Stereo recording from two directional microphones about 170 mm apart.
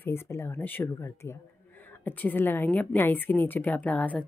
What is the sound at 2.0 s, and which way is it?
A woman's voice, 10° left (ahead or behind).